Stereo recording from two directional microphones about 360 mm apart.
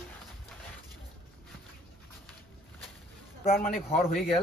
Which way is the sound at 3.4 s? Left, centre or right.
Left.